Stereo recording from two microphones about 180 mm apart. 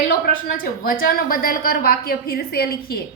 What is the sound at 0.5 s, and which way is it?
A woman's voice, 50° left (ahead or behind).